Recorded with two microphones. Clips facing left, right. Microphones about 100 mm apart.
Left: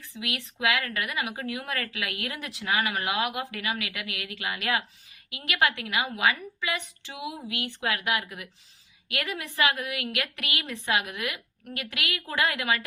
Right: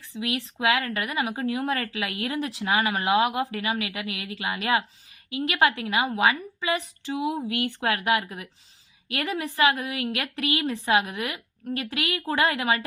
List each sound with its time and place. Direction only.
0.1 s a woman's voice: 30° right (ahead or behind)